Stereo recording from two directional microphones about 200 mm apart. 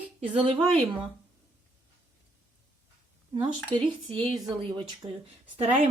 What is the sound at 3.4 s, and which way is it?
Speech, 25° right (ahead or behind).